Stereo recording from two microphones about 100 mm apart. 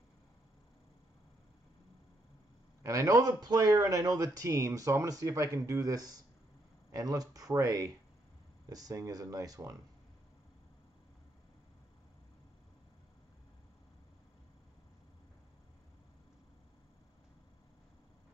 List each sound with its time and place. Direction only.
2.8 s speech: 30° right (ahead or behind)